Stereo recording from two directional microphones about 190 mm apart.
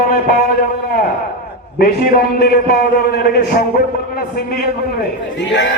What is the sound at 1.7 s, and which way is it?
A man's voice, 50° left (ahead or behind).